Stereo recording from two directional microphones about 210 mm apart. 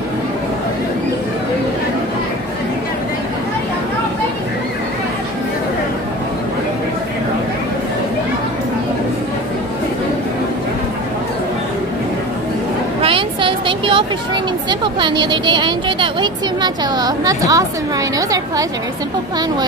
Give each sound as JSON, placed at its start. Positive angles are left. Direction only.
{"t": 13.0, "sound": "a woman's voice", "side_deg": -25}